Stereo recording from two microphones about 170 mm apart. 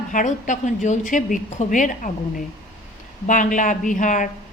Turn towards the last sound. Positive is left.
turn(degrees=50)  # may be behind; listen again after turning